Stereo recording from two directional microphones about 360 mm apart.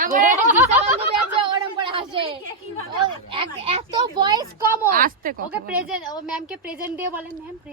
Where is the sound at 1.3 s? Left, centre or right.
Centre.